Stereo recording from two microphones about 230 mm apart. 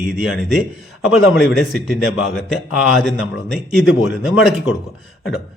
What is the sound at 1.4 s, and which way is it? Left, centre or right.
Speech, left.